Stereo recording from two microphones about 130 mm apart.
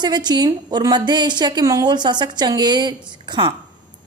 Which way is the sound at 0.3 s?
35° right (ahead or behind).